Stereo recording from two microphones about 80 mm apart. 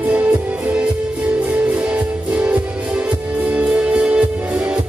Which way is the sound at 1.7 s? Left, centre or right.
Centre.